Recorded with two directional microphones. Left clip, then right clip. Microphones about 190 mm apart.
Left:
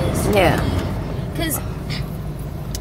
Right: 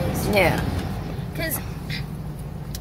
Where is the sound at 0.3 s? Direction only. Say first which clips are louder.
Left 3 dB; 10° right (ahead or behind).